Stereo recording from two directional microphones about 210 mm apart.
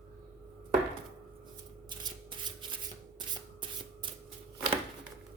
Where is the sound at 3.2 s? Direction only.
25° right (ahead or behind).